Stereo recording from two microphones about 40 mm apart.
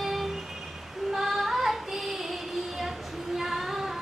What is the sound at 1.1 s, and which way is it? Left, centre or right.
Child singing, centre.